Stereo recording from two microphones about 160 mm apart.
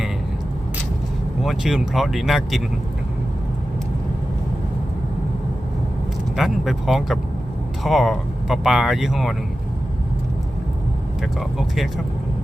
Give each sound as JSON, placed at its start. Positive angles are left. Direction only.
{"t": 1.4, "sound": "speech", "side_deg": 0}
{"t": 6.3, "sound": "speech", "side_deg": 0}
{"t": 11.2, "sound": "speech", "side_deg": 0}